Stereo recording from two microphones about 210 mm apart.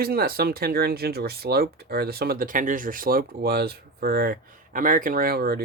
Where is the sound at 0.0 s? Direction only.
45° right (ahead or behind).